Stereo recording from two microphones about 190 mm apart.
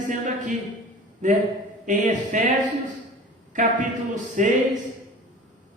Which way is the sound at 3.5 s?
40° right (ahead or behind).